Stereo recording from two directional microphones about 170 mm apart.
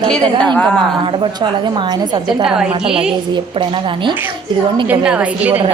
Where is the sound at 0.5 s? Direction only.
5° left (ahead or behind).